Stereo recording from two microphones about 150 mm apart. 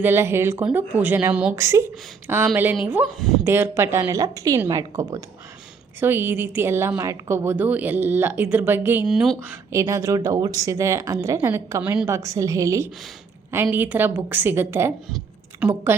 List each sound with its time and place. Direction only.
0.0 s a woman's voice: 15° right (ahead or behind)
1.5 s a woman's voice: 20° right (ahead or behind)
3.2 s speech: centre (ahead or behind)
3.4 s a woman's voice: 15° right (ahead or behind)
6.0 s a woman's voice: 15° right (ahead or behind)
9.0 s speech: centre (ahead or behind)
9.7 s a woman's voice: 20° right (ahead or behind)